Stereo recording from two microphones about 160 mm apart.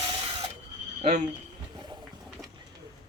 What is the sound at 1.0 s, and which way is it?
Speech, 50° right (ahead or behind).